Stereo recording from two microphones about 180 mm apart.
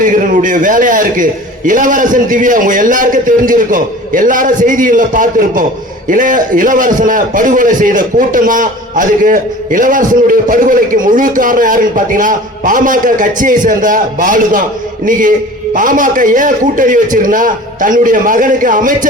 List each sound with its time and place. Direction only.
0.0 s a man's voice: 45° right (ahead or behind)
15.7 s a man's voice: 50° right (ahead or behind)